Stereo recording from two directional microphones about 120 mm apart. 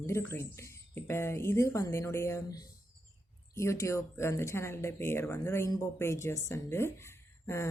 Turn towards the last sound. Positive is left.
turn(degrees=20)  # may be behind; listen again after turning